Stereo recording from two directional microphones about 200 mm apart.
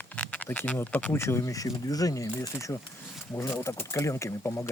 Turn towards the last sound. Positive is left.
turn(degrees=15)  # may be behind; listen again after turning